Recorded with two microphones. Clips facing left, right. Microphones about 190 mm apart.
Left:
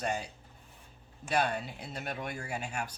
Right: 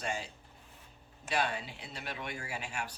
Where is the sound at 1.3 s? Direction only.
45° left (ahead or behind).